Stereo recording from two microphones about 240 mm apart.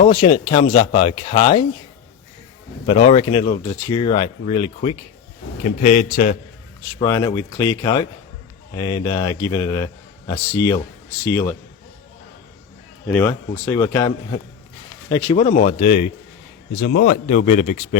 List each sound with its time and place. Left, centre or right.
0.1 s speech: centre
2.8 s speech: left
7.0 s a man's voice: centre
13.1 s a man's voice: centre
15.1 s speech: left